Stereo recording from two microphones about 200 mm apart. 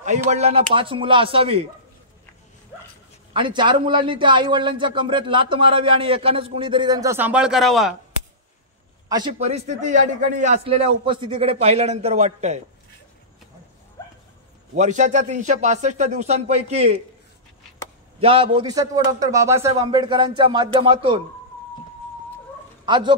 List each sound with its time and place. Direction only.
0.3 s a man's voice: 30° right (ahead or behind)
3.3 s a man's voice: 25° right (ahead or behind); by 7.9 s centre (ahead or behind)
9.3 s a man's voice: 35° right (ahead or behind)
14.8 s a man's voice: 35° right (ahead or behind)
18.2 s a man's voice: 25° right (ahead or behind)
22.8 s a man's voice: 25° right (ahead or behind)